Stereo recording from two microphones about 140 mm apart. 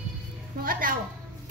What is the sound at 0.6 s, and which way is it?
Speech, 90° right.